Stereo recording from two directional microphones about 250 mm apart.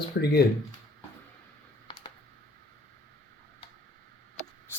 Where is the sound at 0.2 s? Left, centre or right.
Left.